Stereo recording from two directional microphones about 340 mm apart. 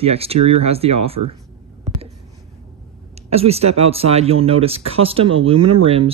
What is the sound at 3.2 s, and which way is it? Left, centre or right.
Speech, centre.